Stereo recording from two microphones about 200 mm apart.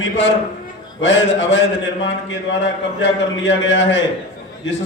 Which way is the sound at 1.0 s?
65° left (ahead or behind).